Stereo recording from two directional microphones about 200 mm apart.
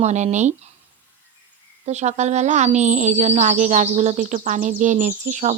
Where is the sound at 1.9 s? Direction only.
35° right (ahead or behind).